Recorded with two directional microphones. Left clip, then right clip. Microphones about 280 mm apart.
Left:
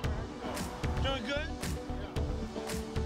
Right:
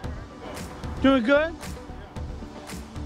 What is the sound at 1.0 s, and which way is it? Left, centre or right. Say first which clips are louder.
Speech: right 16 dB; centre.